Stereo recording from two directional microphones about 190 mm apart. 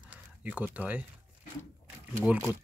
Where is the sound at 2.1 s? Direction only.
10° right (ahead or behind).